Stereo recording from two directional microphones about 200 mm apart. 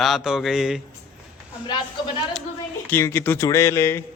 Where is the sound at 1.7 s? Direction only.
25° left (ahead or behind).